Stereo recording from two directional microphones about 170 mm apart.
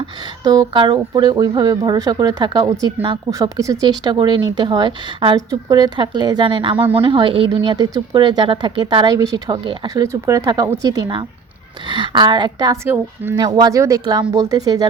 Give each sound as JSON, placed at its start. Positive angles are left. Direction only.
{"t": 0.0, "sound": "speech", "side_deg": -20}
{"t": 13.3, "sound": "speech", "side_deg": -25}